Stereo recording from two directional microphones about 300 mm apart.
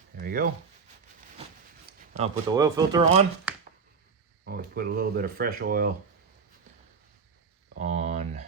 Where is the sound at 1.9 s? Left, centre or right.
Right.